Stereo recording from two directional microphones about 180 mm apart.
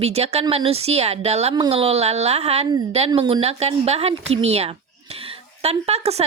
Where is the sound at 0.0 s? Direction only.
35° right (ahead or behind).